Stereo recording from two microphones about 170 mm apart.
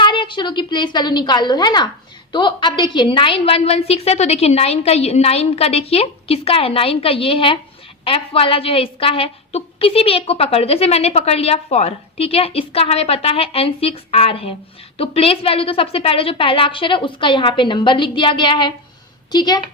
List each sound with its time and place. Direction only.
0.0 s a woman's voice: 30° left (ahead or behind)